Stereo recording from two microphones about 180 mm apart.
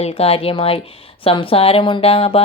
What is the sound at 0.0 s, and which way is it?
Speech, 35° left (ahead or behind).